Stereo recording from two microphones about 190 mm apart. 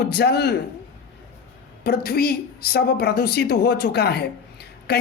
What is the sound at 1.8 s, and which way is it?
Speech, 55° left (ahead or behind).